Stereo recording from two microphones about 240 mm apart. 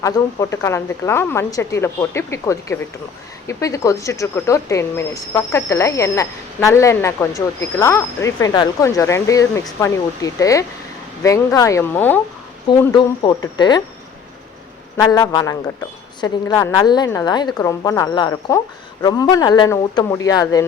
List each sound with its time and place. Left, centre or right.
0.0 s speech: centre
14.9 s speech: centre